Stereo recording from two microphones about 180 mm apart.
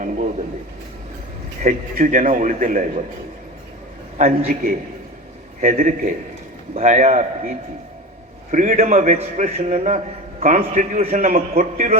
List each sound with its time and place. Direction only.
1.6 s a man's voice: 50° right (ahead or behind)
4.2 s a man's voice: 50° right (ahead or behind)